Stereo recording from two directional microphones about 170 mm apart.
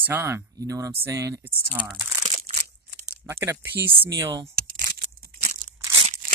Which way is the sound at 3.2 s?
15° right (ahead or behind).